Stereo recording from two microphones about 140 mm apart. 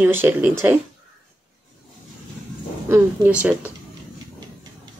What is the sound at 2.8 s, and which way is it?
Speech, 15° right (ahead or behind).